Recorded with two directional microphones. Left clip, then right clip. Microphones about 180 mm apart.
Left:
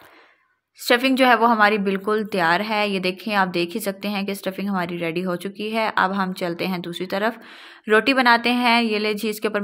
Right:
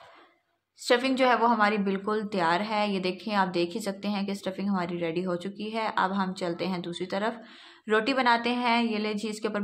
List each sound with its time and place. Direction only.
0.8 s a woman's voice: 25° left (ahead or behind)